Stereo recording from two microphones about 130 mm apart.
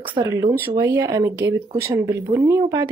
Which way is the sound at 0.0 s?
40° right (ahead or behind).